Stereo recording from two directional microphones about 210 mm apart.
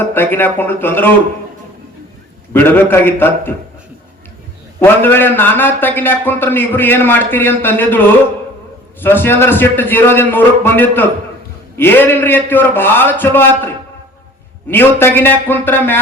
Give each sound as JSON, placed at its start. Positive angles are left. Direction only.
{"t": 0.1, "sound": "a man's voice", "side_deg": 10}
{"t": 2.5, "sound": "a man's voice", "side_deg": 10}
{"t": 4.8, "sound": "a man's voice", "side_deg": 10}
{"t": 14.7, "sound": "a man's voice", "side_deg": 10}